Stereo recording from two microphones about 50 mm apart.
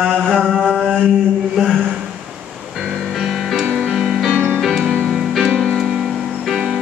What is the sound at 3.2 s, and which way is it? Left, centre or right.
Music, centre.